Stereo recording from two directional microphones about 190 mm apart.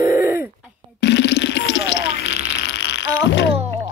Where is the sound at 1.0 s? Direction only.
65° left (ahead or behind).